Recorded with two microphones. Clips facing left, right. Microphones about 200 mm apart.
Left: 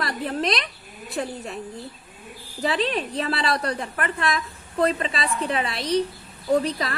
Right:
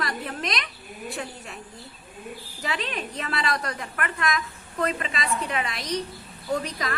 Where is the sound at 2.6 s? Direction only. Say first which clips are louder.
Left 7 dB; 35° left (ahead or behind).